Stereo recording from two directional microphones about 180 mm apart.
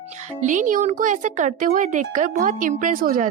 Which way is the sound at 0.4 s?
45° right (ahead or behind).